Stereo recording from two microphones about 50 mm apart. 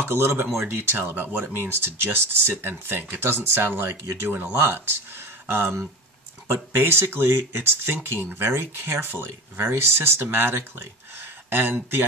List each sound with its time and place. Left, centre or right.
0.0 s speech: right
1.4 s speech: right